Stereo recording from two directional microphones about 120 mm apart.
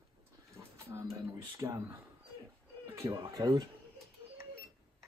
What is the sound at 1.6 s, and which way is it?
Speech, 25° right (ahead or behind).